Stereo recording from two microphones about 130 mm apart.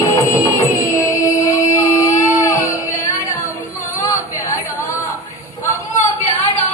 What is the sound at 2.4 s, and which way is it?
Music, 25° left (ahead or behind).